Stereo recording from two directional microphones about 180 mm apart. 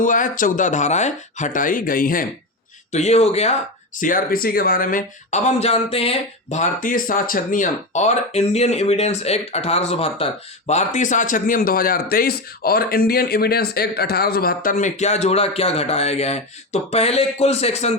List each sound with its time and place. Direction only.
0.0 s speech: 45° left (ahead or behind)
2.9 s speech: 40° left (ahead or behind)
4.0 s speech: 50° left (ahead or behind); by 17.9 s 35° left (ahead or behind)